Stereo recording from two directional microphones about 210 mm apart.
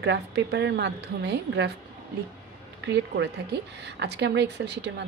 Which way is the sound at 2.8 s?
55° right (ahead or behind).